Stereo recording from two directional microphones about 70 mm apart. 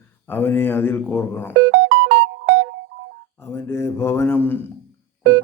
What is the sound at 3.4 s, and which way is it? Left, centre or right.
Mantra, left.